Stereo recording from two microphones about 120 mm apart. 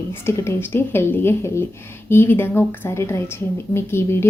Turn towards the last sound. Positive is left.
turn(degrees=20)  # may be behind; listen again after turning